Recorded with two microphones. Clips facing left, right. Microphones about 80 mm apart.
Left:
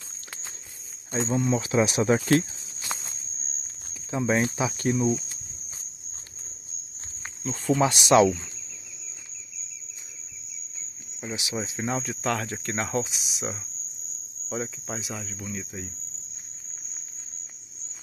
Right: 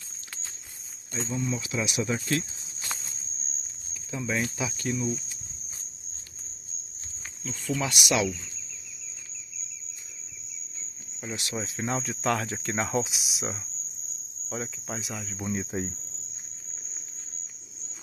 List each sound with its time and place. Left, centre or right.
1.3 s speech: left
4.1 s speech: left
7.4 s speech: left
11.1 s speech: centre
15.4 s speech: right